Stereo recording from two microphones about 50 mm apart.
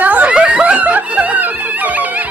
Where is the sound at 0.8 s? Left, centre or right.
Right.